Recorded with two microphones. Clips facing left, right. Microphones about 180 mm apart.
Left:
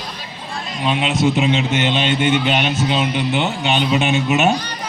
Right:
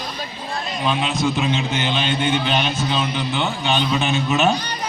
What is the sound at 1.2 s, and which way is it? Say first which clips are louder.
A man's voice: left 5 dB; 25° left (ahead or behind).